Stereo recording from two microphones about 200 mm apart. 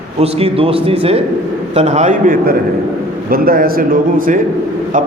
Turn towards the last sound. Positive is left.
turn(degrees=-45)  # may be behind; listen again after turning